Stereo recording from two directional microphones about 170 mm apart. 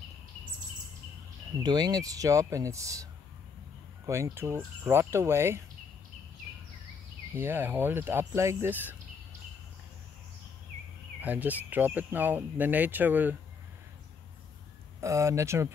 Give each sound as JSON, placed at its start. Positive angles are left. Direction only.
{"t": 1.6, "sound": "speech", "side_deg": -25}
{"t": 7.3, "sound": "speech", "side_deg": -10}
{"t": 11.1, "sound": "speech", "side_deg": -10}
{"t": 15.0, "sound": "speech", "side_deg": -15}